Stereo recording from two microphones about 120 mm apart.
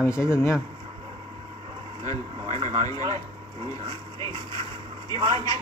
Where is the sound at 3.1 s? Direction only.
55° right (ahead or behind).